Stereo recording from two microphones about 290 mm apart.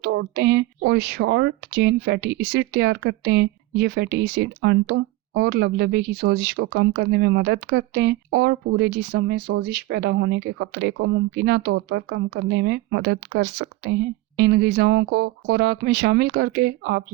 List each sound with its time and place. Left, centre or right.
0.0 s speech: right